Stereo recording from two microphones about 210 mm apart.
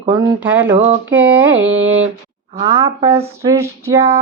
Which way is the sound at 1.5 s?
65° right (ahead or behind).